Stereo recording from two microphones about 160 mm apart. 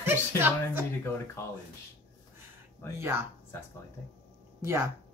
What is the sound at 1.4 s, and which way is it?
Speech, 15° left (ahead or behind).